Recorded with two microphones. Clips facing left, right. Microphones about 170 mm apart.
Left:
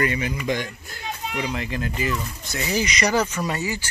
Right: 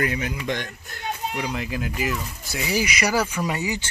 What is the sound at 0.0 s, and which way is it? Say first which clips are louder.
Speech: left 2 dB; centre (ahead or behind).